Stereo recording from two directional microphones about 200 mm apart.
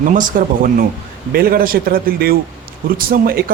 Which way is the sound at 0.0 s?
40° right (ahead or behind).